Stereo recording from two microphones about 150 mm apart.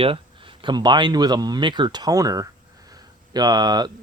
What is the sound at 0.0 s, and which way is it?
Speech, 35° right (ahead or behind).